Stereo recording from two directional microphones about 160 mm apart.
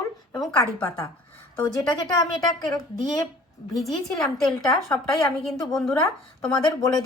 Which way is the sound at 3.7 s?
Centre (ahead or behind).